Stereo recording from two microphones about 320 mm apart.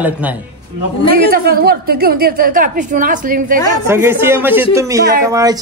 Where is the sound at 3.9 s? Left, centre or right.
Centre.